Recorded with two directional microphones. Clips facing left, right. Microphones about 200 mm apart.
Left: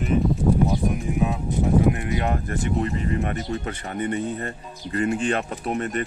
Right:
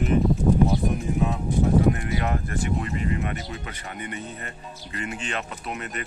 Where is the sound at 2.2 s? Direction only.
35° left (ahead or behind).